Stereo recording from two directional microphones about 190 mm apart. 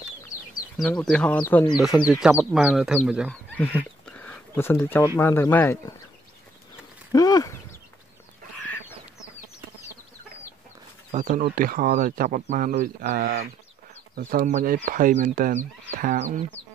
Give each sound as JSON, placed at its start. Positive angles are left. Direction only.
{"t": 0.7, "sound": "speech", "side_deg": 5}
{"t": 2.1, "sound": "speech", "side_deg": -5}
{"t": 7.1, "sound": "speech", "side_deg": 20}
{"t": 11.1, "sound": "speech", "side_deg": -40}